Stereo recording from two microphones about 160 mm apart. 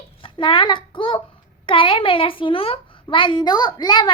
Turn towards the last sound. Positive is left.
turn(degrees=25)  # may be behind; listen again after turning